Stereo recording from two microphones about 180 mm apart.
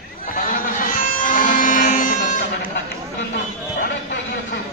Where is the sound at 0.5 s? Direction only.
50° left (ahead or behind).